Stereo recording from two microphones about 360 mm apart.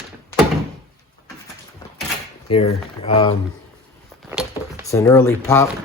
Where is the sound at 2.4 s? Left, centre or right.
Centre.